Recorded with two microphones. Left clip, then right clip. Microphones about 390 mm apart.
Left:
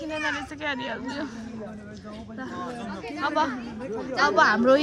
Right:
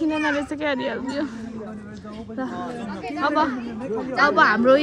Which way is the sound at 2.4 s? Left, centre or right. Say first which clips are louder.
Right 5 dB; centre.